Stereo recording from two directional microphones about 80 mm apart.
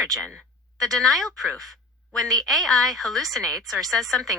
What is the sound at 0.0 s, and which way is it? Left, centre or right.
A woman's voice, centre.